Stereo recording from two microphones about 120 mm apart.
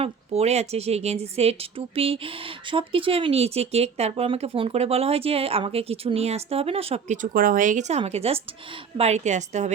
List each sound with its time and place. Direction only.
0.0 s speech: 60° right (ahead or behind)
2.0 s speech: 50° right (ahead or behind)
7.1 s a woman's voice: 90° right; by 9.7 s 75° right (ahead or behind)